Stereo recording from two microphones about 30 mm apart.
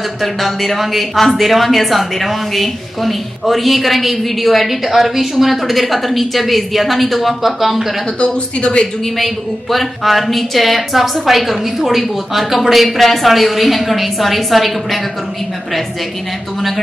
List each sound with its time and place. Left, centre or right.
0.2 s a woman's voice: centre
8.2 s speech: left
9.2 s a woman's voice: centre